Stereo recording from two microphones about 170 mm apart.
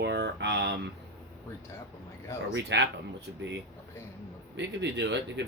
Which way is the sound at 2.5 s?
90° right.